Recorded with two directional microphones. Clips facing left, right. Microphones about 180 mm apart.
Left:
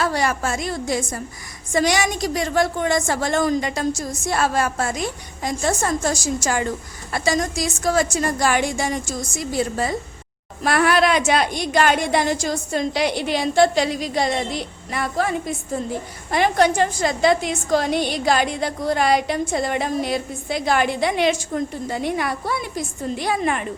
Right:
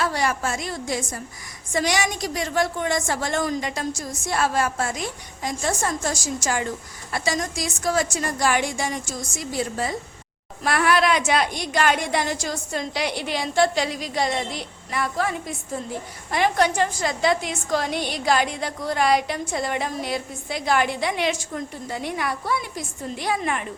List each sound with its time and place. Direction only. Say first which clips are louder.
0.0 s a woman's voice: left 2 dB; 40° left (ahead or behind)
10.6 s a woman's voice: left 3 dB; 35° left (ahead or behind)